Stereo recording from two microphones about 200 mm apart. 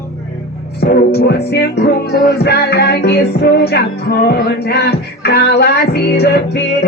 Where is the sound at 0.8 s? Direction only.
55° left (ahead or behind).